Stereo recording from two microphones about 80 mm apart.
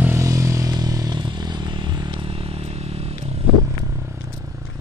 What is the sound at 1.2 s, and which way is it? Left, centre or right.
Vehicle, right.